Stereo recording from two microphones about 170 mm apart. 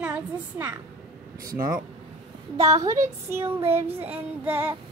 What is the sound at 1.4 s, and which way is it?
Speech, 20° right (ahead or behind).